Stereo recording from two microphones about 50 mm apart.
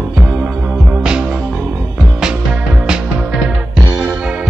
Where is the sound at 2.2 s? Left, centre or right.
Centre.